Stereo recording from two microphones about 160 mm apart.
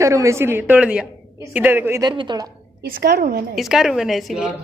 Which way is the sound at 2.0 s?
30° right (ahead or behind).